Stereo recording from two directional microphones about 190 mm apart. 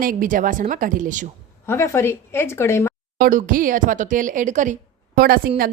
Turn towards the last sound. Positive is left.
turn(degrees=-50)  # may be behind; listen again after turning